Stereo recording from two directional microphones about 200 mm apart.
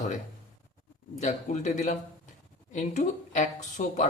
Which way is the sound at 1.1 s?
35° left (ahead or behind).